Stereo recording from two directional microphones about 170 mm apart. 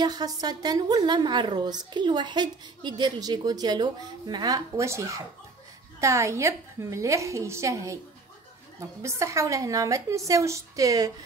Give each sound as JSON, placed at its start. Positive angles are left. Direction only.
{"t": 0.0, "sound": "a woman's voice", "side_deg": -25}
{"t": 9.0, "sound": "a woman's voice", "side_deg": -15}